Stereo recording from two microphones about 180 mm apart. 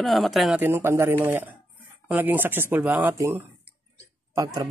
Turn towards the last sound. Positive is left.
turn(degrees=-20)  # may be behind; listen again after turning